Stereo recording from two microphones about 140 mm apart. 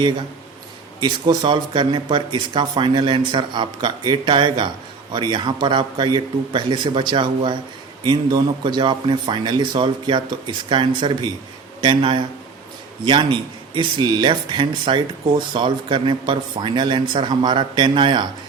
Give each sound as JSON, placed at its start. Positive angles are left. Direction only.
{"t": 0.9, "sound": "speech", "side_deg": -30}